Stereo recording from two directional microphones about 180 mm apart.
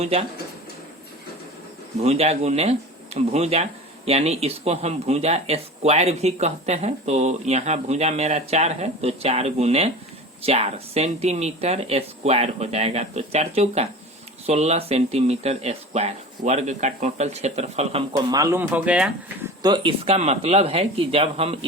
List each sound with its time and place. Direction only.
0.0 s speech: 35° right (ahead or behind)
2.0 s speech: 35° right (ahead or behind)
18.1 s speech: 20° right (ahead or behind); by 19.5 s 5° right (ahead or behind)
19.6 s speech: 25° right (ahead or behind)